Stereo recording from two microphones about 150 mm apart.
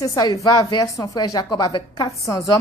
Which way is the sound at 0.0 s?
25° left (ahead or behind).